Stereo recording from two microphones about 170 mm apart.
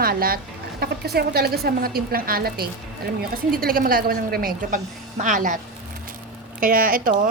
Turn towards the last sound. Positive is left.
turn(degrees=-55)  # may be behind; listen again after turning